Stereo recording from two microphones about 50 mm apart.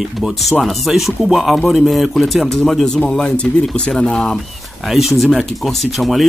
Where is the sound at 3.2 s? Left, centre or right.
Centre.